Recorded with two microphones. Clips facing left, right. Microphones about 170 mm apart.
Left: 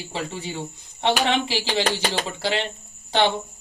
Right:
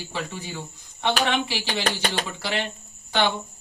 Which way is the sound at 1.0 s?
25° left (ahead or behind).